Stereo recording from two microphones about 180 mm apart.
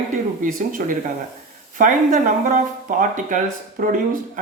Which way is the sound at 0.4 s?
50° right (ahead or behind).